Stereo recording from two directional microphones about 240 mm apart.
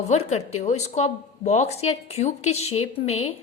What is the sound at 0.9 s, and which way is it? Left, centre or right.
A woman's voice, left.